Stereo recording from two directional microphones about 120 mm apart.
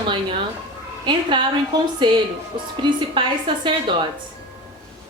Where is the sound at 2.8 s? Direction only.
40° right (ahead or behind).